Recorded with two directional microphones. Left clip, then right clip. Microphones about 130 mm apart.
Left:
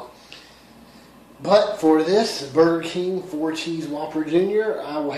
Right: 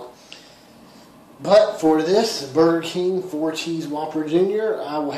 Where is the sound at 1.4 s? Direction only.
10° right (ahead or behind).